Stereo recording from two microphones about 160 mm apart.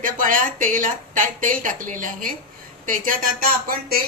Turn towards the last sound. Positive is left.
turn(degrees=-70)  # may be behind; listen again after turning